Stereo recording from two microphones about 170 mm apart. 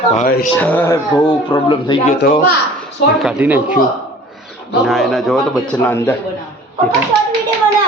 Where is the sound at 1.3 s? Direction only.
30° left (ahead or behind).